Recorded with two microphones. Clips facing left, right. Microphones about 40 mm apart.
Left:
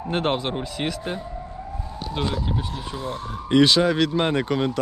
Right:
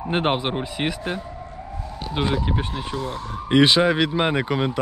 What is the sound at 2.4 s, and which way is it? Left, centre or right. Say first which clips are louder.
Speech: right 2 dB; right.